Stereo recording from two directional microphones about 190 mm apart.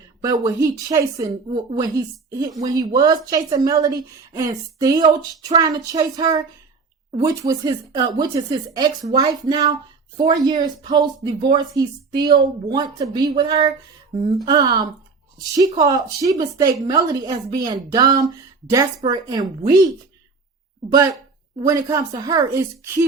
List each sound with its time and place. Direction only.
0.2 s a woman's voice: 20° right (ahead or behind)
20.9 s a woman's voice: 20° right (ahead or behind)